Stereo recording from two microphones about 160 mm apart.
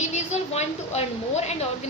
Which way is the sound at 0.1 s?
40° left (ahead or behind).